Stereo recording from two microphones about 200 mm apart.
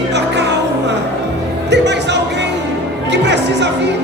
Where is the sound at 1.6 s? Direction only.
60° right (ahead or behind).